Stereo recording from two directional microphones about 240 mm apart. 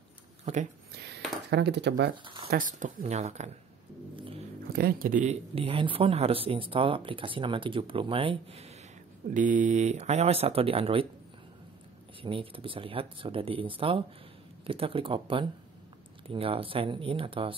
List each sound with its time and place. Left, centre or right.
0.9 s speech: right
2.5 s speech: right
4.7 s speech: right
12.2 s speech: right